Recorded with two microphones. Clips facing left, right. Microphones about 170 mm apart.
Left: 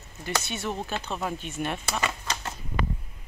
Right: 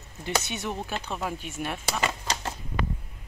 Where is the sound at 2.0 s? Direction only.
30° right (ahead or behind).